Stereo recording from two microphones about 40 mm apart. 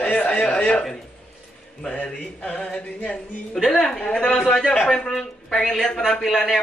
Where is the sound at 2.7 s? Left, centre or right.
Left.